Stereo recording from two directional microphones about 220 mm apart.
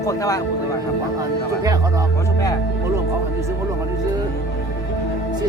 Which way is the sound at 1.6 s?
15° right (ahead or behind).